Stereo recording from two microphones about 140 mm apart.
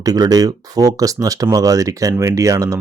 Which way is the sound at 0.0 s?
25° right (ahead or behind).